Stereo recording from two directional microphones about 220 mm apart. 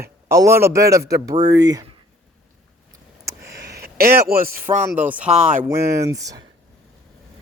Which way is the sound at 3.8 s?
45° right (ahead or behind).